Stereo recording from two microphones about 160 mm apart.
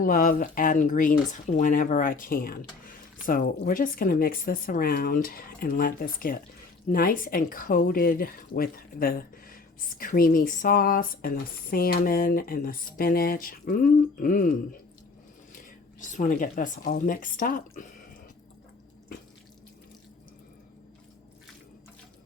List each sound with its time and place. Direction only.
0.0 s speech: 60° left (ahead or behind)
16.0 s speech: 55° left (ahead or behind)